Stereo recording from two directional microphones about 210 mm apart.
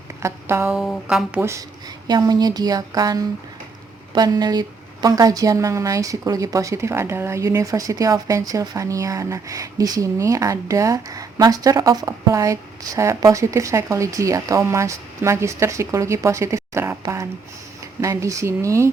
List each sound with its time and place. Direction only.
0.2 s a woman's voice: 15° right (ahead or behind)
0.8 s a woman's voice: centre (ahead or behind)